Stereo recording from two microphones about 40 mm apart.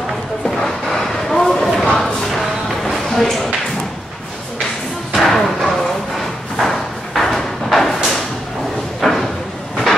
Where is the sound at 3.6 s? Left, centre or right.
Centre.